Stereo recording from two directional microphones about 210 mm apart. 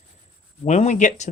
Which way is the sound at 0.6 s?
35° left (ahead or behind).